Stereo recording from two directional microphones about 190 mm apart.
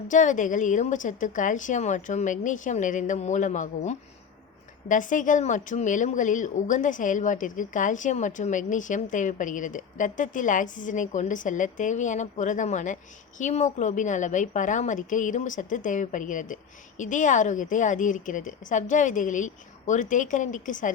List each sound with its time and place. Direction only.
0.1 s a woman's voice: 40° left (ahead or behind)